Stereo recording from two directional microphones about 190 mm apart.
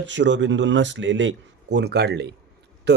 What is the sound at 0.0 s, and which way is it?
Speech, 70° right (ahead or behind).